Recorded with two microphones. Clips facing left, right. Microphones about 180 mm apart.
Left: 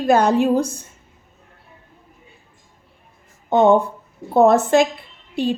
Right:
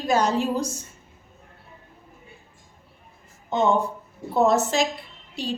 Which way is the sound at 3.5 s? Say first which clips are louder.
Left 7 dB; 60° left (ahead or behind).